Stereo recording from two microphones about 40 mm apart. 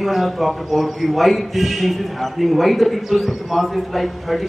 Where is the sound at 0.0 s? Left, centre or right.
Centre.